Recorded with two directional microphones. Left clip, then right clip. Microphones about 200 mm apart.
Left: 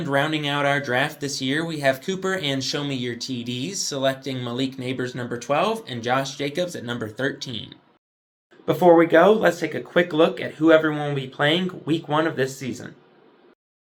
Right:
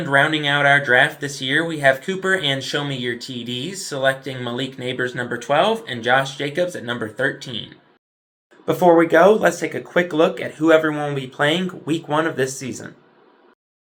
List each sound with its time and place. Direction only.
0.0 s speech: 35° left (ahead or behind)
6.9 s speech: 30° left (ahead or behind)
8.6 s speech: 5° right (ahead or behind)